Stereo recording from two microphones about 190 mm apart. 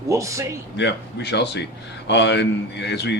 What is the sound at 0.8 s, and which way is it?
A man's voice, 65° left (ahead or behind).